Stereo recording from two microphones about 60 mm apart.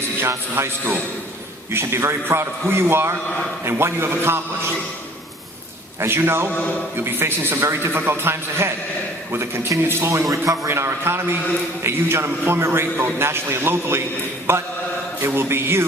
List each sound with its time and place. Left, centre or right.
0.2 s a man's voice: right
6.0 s a man's voice: right
10.3 s speech: right
10.7 s a man's voice: right